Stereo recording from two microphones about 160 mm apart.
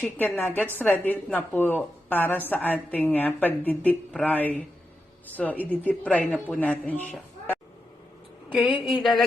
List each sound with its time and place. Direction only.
0.0 s speech: 10° left (ahead or behind)
8.6 s a woman's voice: 30° left (ahead or behind)
9.0 s speech: centre (ahead or behind)